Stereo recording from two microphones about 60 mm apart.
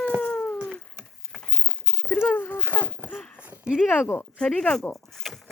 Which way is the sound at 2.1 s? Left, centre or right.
Left.